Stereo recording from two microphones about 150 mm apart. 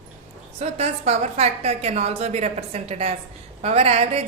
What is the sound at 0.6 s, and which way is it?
A woman's voice, 45° right (ahead or behind).